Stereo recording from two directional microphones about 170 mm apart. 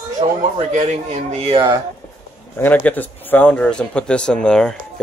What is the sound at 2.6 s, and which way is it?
Speech, 10° left (ahead or behind).